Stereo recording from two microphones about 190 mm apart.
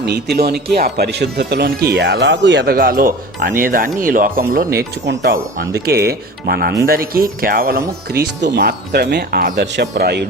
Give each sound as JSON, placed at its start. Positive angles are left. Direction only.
{"t": 0.0, "sound": "speech", "side_deg": -60}
{"t": 8.1, "sound": "speech", "side_deg": -60}